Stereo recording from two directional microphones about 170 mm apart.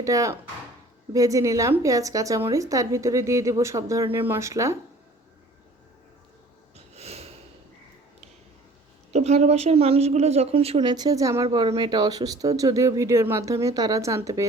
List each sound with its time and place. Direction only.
0.0 s speech: 20° right (ahead or behind)
6.7 s snort: 40° right (ahead or behind)
9.1 s speech: 40° right (ahead or behind); by 11.4 s 20° right (ahead or behind)
11.4 s speech: 30° right (ahead or behind)